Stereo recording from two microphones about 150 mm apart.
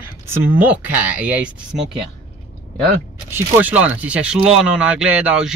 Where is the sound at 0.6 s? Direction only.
10° right (ahead or behind).